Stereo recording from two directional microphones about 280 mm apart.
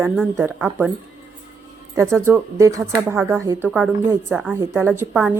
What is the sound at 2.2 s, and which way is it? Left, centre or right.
Speech, centre.